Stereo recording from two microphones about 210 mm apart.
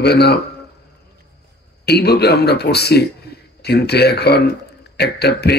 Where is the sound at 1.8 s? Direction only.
50° left (ahead or behind).